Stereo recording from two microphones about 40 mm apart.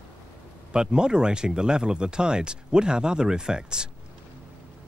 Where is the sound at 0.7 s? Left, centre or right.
Right.